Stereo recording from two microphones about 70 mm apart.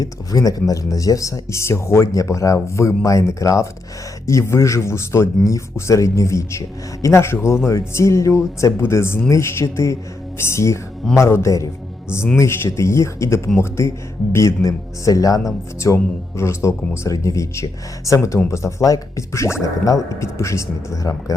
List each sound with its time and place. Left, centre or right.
0.0 s speech: left